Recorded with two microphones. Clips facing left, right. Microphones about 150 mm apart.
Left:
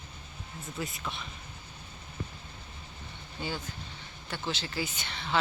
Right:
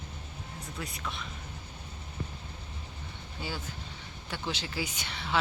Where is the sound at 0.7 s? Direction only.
Centre (ahead or behind).